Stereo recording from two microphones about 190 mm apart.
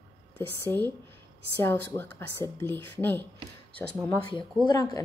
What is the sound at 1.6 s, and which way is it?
Speech, 10° left (ahead or behind).